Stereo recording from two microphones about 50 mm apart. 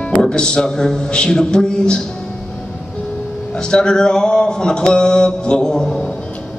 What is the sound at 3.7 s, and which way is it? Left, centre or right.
Mantra, centre.